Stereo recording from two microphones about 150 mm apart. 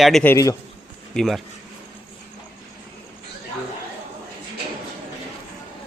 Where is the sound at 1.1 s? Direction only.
Centre (ahead or behind).